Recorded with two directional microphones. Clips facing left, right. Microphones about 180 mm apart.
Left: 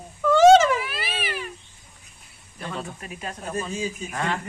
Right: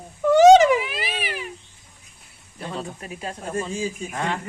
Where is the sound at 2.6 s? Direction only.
25° right (ahead or behind).